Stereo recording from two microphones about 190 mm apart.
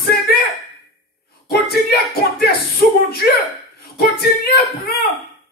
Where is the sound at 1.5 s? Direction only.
55° left (ahead or behind).